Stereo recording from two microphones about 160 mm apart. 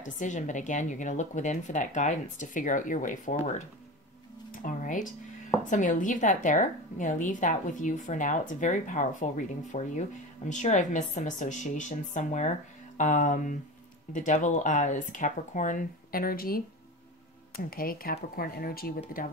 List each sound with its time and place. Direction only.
0.0 s a woman's voice: 50° left (ahead or behind)
4.5 s a sound: 55° left (ahead or behind)
5.7 s a woman's voice: 50° left (ahead or behind); by 18.9 s 65° left (ahead or behind)